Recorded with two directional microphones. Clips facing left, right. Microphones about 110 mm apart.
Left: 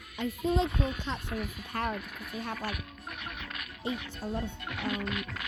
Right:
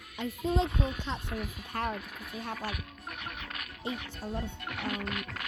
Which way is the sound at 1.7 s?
30° right (ahead or behind).